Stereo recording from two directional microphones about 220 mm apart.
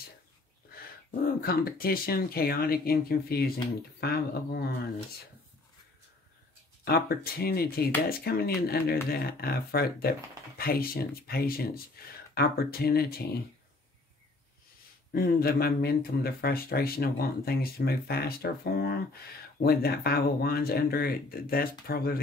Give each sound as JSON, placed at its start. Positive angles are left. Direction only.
{"t": 0.7, "sound": "speech", "side_deg": 40}
{"t": 6.8, "sound": "speech", "side_deg": 45}
{"t": 15.1, "sound": "speech", "side_deg": 45}